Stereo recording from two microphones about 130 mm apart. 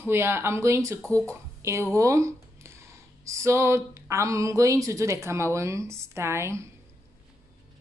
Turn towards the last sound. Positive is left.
turn(degrees=-20)  # may be behind; listen again after turning